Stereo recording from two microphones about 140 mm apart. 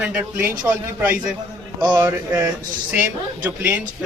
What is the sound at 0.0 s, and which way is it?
A man's voice, 10° right (ahead or behind).